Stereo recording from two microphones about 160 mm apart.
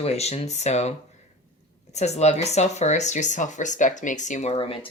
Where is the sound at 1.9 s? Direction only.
45° left (ahead or behind).